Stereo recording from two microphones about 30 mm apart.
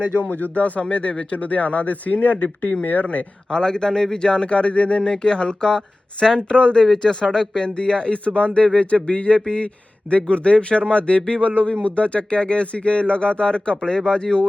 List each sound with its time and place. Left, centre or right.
0.3 s speech: left
2.8 s speech: left
3.5 s speech: left
4.3 s speech: left